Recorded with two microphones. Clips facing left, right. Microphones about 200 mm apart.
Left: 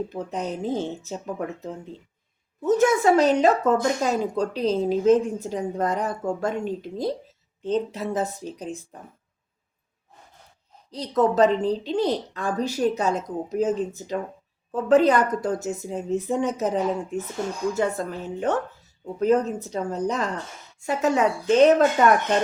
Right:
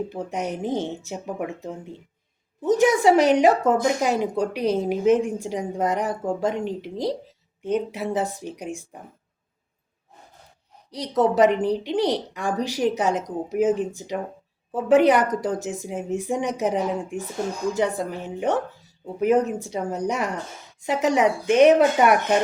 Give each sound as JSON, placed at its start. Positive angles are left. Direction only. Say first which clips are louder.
{"t": 0.1, "sound": "a woman's voice", "louder": "right 1 dB", "side_deg": -15}
{"t": 10.9, "sound": "a woman's voice", "louder": "right 1 dB", "side_deg": -15}